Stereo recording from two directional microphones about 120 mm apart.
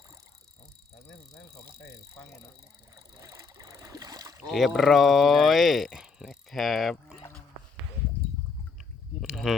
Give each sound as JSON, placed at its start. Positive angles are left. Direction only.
{"t": 2.9, "sound": "boat", "side_deg": -30}
{"t": 4.4, "sound": "speech", "side_deg": 0}
{"t": 9.2, "sound": "a sound", "side_deg": 0}